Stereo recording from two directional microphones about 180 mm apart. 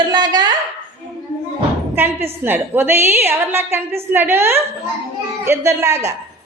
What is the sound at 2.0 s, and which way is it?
A woman's voice, 10° right (ahead or behind).